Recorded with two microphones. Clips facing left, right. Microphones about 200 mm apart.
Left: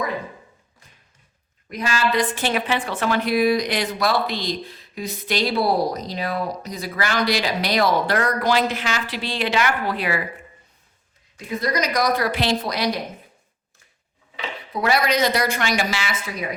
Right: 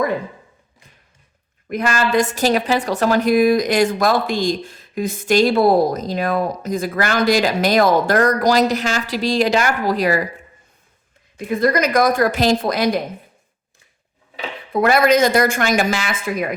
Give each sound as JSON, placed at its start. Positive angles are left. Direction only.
{"t": 1.7, "sound": "a woman's voice", "side_deg": -55}
{"t": 11.3, "sound": "a woman's voice", "side_deg": -55}
{"t": 14.7, "sound": "a woman's voice", "side_deg": -50}